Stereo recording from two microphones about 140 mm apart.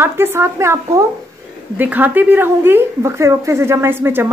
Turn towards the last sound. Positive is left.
turn(degrees=-15)  # may be behind; listen again after turning